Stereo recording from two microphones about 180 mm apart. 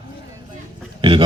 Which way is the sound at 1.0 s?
25° right (ahead or behind).